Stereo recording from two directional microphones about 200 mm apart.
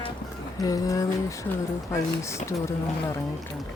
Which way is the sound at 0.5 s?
15° left (ahead or behind).